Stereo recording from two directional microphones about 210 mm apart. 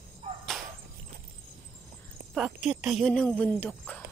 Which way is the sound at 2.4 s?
5° right (ahead or behind).